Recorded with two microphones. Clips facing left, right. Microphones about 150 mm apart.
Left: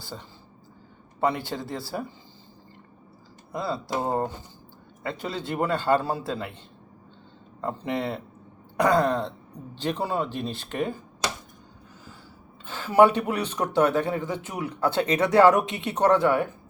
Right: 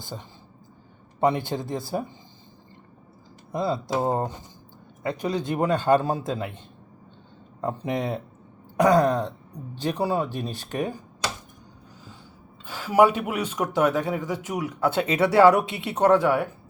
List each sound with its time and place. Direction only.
0.1 s speech: 15° right (ahead or behind)
3.5 s speech: 20° right (ahead or behind)
7.6 s speech: 15° right (ahead or behind)
12.6 s speech: 10° right (ahead or behind)